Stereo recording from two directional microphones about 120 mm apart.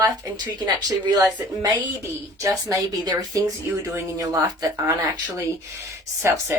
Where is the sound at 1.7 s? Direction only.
25° right (ahead or behind).